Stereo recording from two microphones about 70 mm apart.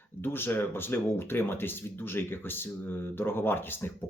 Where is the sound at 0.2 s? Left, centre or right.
Left.